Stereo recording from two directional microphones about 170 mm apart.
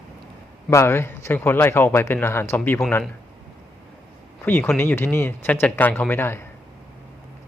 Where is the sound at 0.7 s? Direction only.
15° left (ahead or behind).